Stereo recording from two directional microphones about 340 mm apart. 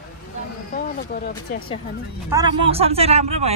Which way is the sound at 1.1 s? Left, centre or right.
Left.